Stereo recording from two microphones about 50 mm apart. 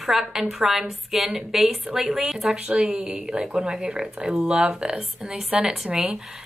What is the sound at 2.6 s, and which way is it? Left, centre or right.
Speech, right.